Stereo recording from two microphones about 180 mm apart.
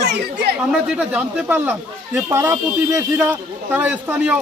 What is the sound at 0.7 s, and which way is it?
A man's voice, 5° right (ahead or behind).